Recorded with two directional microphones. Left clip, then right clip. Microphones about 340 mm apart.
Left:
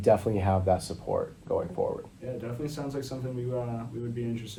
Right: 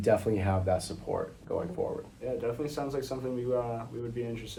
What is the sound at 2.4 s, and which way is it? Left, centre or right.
Speech, centre.